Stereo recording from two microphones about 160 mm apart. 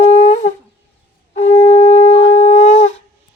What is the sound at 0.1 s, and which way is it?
Shofar, 50° left (ahead or behind).